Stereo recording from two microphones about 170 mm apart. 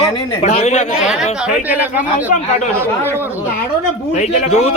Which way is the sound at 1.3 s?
5° right (ahead or behind).